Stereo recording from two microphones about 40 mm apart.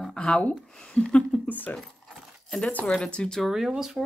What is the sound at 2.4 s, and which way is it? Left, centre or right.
Speech, centre.